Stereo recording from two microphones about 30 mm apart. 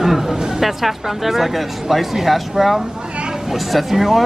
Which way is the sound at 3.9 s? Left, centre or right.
Centre.